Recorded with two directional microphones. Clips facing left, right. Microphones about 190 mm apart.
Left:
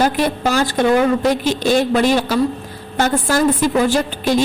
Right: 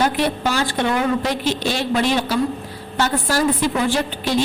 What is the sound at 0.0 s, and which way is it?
A woman's voice, 40° left (ahead or behind).